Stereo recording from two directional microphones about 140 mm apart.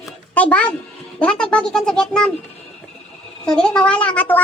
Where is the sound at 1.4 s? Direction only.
5° left (ahead or behind).